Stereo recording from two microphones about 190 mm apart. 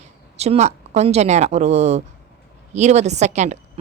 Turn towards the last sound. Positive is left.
turn(degrees=-35)  # may be behind; listen again after turning